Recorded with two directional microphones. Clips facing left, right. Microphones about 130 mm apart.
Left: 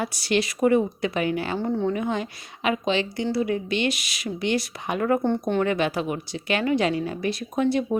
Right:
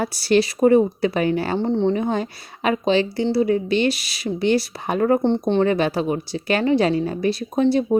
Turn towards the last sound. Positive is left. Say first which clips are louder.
# right 5 dB
turn(degrees=-30)  # may be behind; listen again after turning